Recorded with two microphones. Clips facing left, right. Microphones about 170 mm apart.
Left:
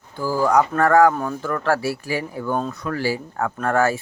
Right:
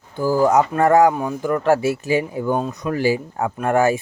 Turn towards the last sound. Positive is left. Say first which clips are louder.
# right 3 dB
turn(degrees=-15)  # may be behind; listen again after turning